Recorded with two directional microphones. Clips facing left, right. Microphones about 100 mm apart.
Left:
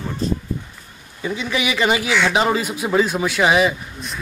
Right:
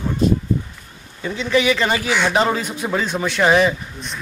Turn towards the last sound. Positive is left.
turn(degrees=5)  # may be behind; listen again after turning